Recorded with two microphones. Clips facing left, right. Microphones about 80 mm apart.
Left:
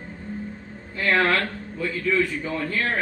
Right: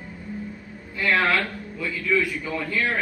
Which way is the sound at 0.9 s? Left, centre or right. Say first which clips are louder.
Left 1 dB; left.